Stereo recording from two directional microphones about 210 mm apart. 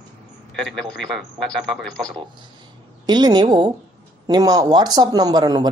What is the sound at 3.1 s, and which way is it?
Speech, 20° right (ahead or behind).